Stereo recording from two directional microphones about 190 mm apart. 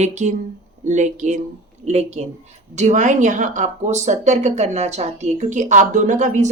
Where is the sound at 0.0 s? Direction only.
40° right (ahead or behind).